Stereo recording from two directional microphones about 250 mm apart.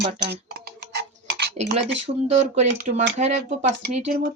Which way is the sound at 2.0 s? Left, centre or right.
Right.